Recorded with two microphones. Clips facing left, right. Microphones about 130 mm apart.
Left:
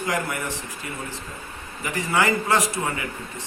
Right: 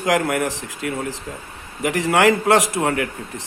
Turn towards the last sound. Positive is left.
turn(degrees=-70)  # may be behind; listen again after turning